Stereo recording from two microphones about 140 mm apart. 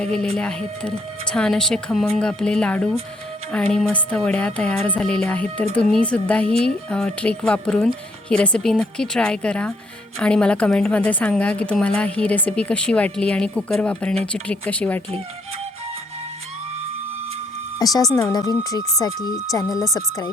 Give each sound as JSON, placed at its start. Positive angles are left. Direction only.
{"t": 0.0, "sound": "speech", "side_deg": 5}
{"t": 17.7, "sound": "speech", "side_deg": 25}